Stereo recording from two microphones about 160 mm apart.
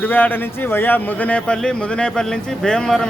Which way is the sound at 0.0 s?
10° left (ahead or behind).